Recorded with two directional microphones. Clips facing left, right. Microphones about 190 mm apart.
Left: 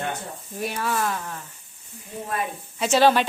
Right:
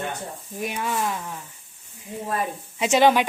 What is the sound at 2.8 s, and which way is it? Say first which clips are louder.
Speech: right 1 dB; 15° right (ahead or behind).